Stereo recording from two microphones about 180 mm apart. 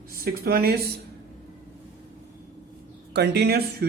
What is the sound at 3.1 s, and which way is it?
Speech, 65° right (ahead or behind).